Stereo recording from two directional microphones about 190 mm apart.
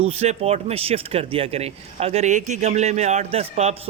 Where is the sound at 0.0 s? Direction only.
35° right (ahead or behind).